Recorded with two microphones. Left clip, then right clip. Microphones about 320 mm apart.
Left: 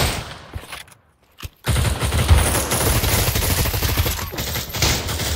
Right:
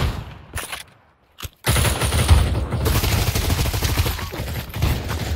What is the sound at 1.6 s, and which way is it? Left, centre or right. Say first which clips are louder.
Fusillade: right 3 dB; centre.